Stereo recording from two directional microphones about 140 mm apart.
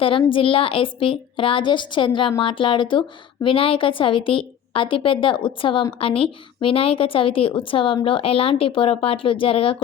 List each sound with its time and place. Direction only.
0.0 s a woman's voice: 40° left (ahead or behind)